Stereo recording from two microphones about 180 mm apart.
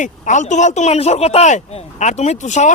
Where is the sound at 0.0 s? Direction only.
40° left (ahead or behind).